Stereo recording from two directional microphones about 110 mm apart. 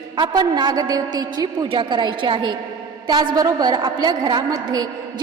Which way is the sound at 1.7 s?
50° right (ahead or behind).